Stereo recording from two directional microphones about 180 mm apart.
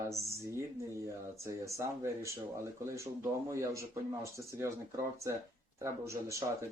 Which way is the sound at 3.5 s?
15° right (ahead or behind).